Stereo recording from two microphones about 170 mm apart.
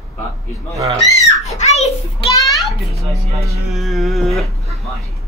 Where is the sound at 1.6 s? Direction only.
40° left (ahead or behind).